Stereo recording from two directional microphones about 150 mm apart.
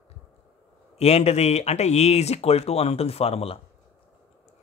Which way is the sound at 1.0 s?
45° left (ahead or behind).